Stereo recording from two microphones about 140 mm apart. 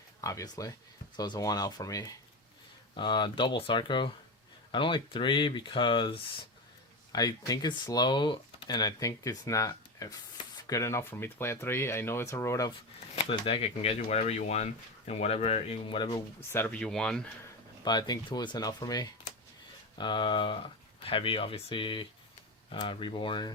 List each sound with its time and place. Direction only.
0.2 s speech: 25° left (ahead or behind)
13.3 s speech: 40° left (ahead or behind)
16.5 s speech: 15° left (ahead or behind)
17.8 s speech: 30° left (ahead or behind)